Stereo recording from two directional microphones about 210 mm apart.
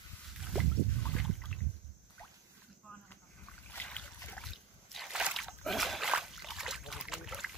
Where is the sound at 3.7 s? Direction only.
5° left (ahead or behind).